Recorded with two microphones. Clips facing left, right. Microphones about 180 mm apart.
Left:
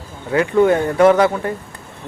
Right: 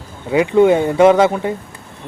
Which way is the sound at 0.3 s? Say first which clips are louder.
Right 2 dB; 15° right (ahead or behind).